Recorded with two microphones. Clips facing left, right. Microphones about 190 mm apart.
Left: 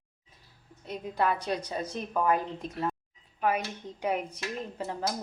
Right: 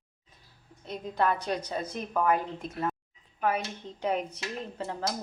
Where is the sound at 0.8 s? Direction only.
10° left (ahead or behind).